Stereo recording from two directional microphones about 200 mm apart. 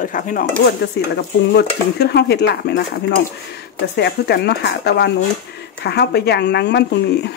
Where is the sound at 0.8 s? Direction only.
55° left (ahead or behind).